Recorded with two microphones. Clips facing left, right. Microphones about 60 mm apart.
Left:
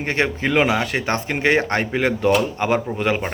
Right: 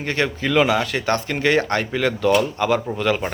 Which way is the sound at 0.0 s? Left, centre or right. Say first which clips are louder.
Left 1 dB; left.